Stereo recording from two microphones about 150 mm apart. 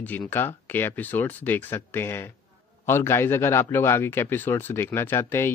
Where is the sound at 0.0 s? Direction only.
15° left (ahead or behind).